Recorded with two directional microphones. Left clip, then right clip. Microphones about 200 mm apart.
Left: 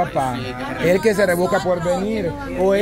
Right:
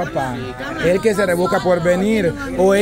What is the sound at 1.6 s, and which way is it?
Speech, 30° right (ahead or behind).